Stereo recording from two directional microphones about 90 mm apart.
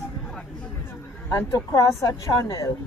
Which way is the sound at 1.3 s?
40° left (ahead or behind).